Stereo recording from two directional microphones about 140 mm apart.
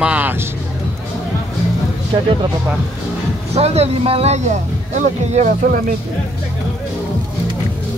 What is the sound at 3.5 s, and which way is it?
Speech, 50° right (ahead or behind).